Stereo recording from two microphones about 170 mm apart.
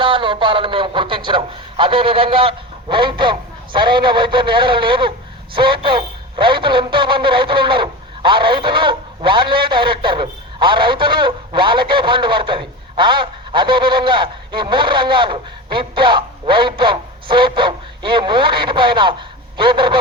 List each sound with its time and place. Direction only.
0.0 s a man's voice: 30° right (ahead or behind)